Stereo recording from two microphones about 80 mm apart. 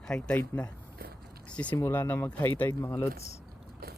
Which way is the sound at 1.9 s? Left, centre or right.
Left.